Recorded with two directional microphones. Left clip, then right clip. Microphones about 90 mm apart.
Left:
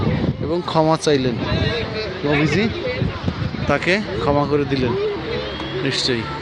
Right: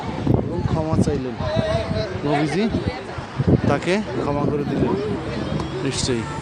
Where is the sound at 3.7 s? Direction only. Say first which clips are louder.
Left 6 dB; 35° right (ahead or behind).